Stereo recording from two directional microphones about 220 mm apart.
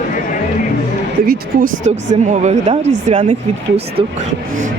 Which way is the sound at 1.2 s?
45° right (ahead or behind).